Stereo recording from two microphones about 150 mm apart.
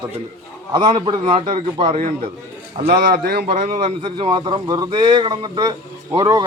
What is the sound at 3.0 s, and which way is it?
Speech, 90° right.